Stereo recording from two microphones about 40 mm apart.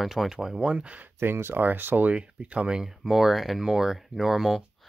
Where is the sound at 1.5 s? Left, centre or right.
Right.